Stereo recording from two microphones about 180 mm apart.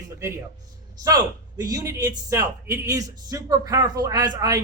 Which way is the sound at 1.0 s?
20° right (ahead or behind).